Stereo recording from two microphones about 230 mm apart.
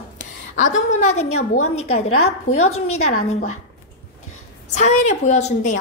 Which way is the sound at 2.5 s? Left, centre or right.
Left.